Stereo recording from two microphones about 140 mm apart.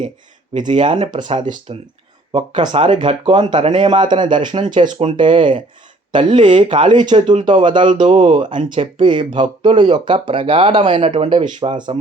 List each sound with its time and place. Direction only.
0.8 s speech: 35° right (ahead or behind)
11.2 s speech: 45° right (ahead or behind)
11.4 s speech: 35° right (ahead or behind)